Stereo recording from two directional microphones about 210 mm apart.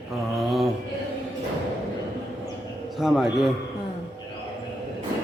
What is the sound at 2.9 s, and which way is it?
Speech, centre (ahead or behind).